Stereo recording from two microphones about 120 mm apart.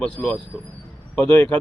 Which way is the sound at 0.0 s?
10° left (ahead or behind).